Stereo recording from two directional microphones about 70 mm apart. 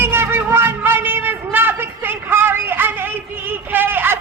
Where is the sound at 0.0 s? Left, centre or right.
Right.